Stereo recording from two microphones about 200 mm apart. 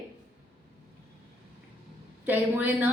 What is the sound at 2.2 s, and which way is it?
Speech, 10° right (ahead or behind).